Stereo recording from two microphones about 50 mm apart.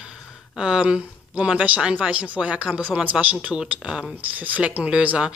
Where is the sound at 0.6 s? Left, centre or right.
Centre.